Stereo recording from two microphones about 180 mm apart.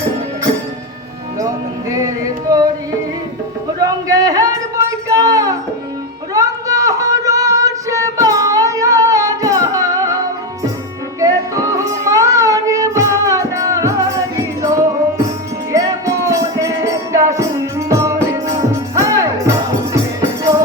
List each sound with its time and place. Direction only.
1.4 s music: 20° right (ahead or behind)
3.8 s a sound: 20° right (ahead or behind)
11.2 s music: 20° right (ahead or behind)